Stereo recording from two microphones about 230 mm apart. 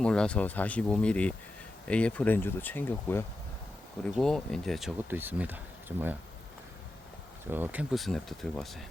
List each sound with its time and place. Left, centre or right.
0.0 s speech: centre
7.5 s speech: centre